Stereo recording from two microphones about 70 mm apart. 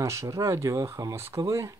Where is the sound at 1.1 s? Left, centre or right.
Right.